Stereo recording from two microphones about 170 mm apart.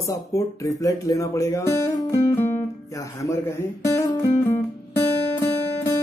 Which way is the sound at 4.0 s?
20° left (ahead or behind).